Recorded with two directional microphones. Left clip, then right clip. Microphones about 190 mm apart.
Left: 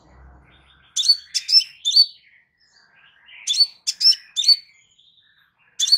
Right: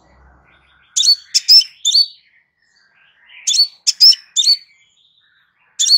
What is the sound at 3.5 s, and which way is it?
Chirp, 25° right (ahead or behind).